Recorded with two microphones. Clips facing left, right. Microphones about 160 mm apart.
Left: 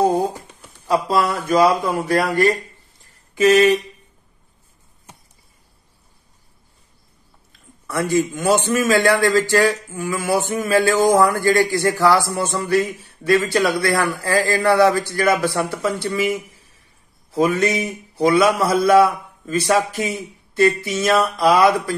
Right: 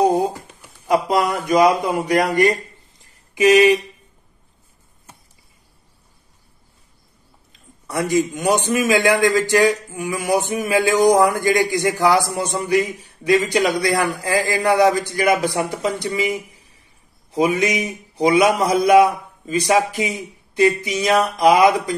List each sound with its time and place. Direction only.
0.0 s a sound: 15° right (ahead or behind)
1.4 s a man's voice: 20° right (ahead or behind)
7.8 s a man's voice: 15° right (ahead or behind)